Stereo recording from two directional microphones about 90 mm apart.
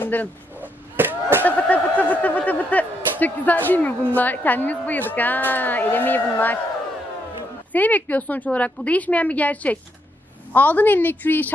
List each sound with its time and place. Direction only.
0.0 s speech: 20° left (ahead or behind)
0.6 s a sound: 25° right (ahead or behind)
1.4 s speech: 15° left (ahead or behind)
7.7 s a woman's voice: 20° left (ahead or behind)